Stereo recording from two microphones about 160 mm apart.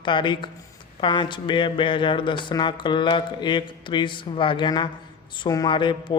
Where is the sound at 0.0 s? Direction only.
30° left (ahead or behind).